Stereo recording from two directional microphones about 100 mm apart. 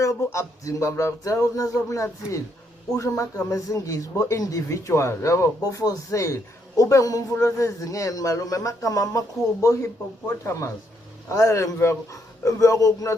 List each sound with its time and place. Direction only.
0.0 s speech: 30° left (ahead or behind)